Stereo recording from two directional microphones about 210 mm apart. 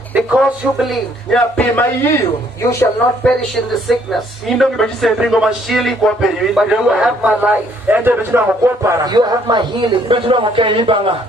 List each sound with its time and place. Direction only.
0.1 s a man's voice: centre (ahead or behind); by 11.1 s 25° right (ahead or behind)